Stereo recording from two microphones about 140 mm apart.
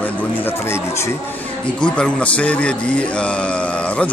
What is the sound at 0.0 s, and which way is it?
Speech, 15° left (ahead or behind).